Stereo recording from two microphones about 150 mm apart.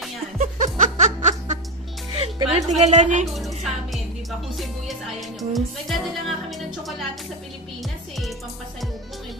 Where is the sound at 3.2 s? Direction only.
Centre (ahead or behind).